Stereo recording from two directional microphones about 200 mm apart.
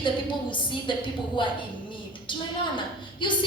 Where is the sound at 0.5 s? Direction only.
25° left (ahead or behind).